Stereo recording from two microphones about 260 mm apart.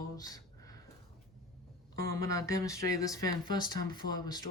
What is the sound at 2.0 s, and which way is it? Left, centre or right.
Speech, centre.